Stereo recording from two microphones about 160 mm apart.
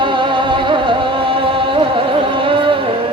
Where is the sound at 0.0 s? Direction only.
30° right (ahead or behind).